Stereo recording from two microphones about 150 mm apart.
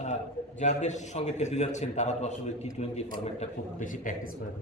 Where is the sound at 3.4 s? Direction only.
55° left (ahead or behind).